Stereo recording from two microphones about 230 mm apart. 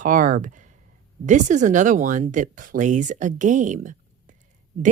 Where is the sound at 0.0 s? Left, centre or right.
Right.